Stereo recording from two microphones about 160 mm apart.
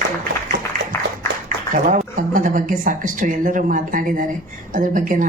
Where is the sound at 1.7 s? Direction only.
55° right (ahead or behind).